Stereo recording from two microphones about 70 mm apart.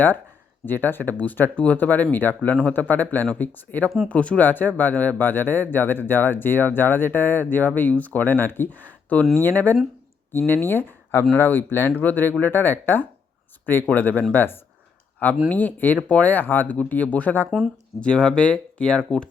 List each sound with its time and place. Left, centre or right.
0.6 s speech: left
13.9 s speech: left
18.0 s speech: centre